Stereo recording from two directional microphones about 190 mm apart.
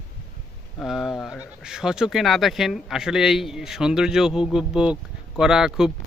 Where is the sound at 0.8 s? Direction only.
Centre (ahead or behind).